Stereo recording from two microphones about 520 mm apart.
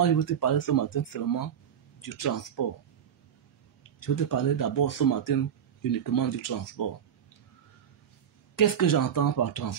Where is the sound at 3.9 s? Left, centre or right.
Left.